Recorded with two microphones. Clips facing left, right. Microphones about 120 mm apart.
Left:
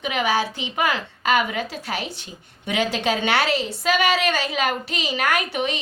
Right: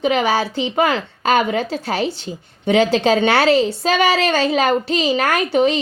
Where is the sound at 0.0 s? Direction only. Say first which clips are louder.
Right 5 dB; 35° right (ahead or behind).